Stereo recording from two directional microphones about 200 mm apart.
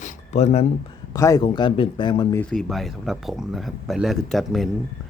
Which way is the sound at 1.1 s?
15° left (ahead or behind).